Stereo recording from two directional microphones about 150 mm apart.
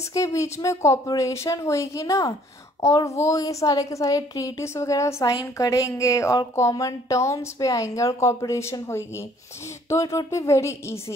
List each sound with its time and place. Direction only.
0.1 s a woman's voice: 20° left (ahead or behind)